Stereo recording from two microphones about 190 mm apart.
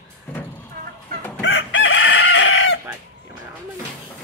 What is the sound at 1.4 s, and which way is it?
Chicken, 75° left (ahead or behind).